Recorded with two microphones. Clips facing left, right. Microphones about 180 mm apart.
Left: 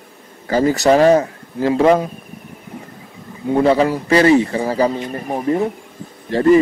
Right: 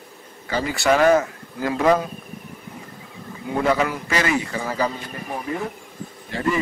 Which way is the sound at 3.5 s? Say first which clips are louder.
Left 7 dB; 30° left (ahead or behind).